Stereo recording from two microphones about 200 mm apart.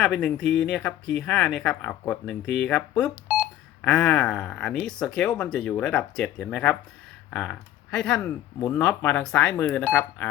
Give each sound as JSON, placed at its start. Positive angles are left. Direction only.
{"t": 0.0, "sound": "speech", "side_deg": 5}